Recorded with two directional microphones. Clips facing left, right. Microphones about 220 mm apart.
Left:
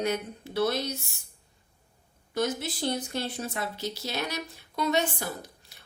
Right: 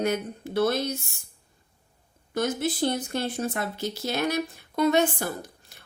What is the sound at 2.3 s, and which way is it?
A woman's voice, 50° right (ahead or behind).